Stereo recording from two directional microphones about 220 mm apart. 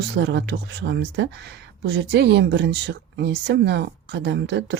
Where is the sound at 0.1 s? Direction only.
50° right (ahead or behind).